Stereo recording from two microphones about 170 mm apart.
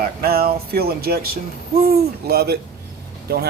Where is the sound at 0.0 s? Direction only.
65° right (ahead or behind).